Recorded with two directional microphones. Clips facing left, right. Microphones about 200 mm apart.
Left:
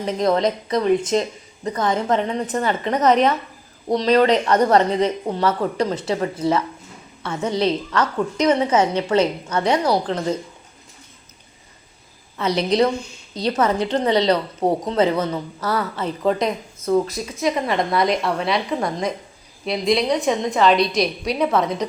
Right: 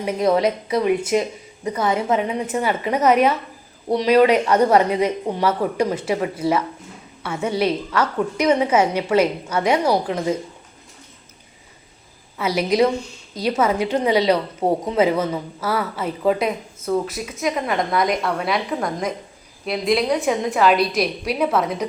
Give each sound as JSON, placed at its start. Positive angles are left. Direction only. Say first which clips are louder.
{"t": 0.0, "sound": "a woman's voice", "louder": "right 1 dB", "side_deg": -10}
{"t": 12.4, "sound": "a woman's voice", "louder": "even", "side_deg": -5}